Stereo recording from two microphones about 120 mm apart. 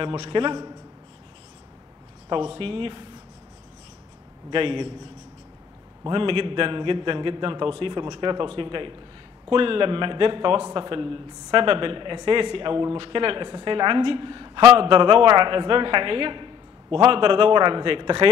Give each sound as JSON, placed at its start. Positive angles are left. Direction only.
{"t": 0.0, "sound": "a man's voice", "side_deg": -45}
{"t": 2.2, "sound": "a man's voice", "side_deg": -45}
{"t": 4.5, "sound": "a man's voice", "side_deg": -45}
{"t": 6.0, "sound": "a man's voice", "side_deg": -45}